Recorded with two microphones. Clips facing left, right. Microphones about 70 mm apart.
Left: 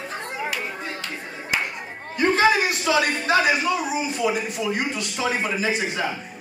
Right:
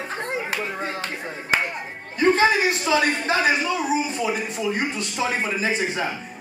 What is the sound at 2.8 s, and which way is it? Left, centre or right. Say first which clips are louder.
Speech: right 1 dB; right.